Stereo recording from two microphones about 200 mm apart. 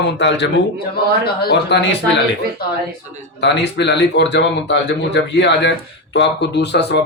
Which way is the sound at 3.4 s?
60° left (ahead or behind).